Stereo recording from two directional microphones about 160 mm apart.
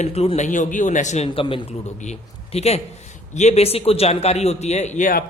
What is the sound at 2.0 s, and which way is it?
A man's voice, 45° left (ahead or behind).